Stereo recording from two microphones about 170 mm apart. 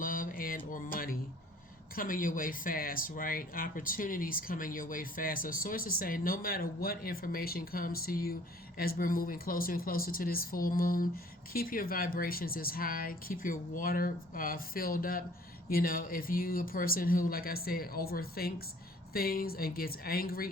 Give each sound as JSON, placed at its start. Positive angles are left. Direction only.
{"t": 0.0, "sound": "music", "side_deg": 55}
{"t": 2.0, "sound": "speech", "side_deg": 55}